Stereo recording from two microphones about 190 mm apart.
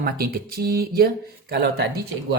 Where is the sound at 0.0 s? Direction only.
55° right (ahead or behind).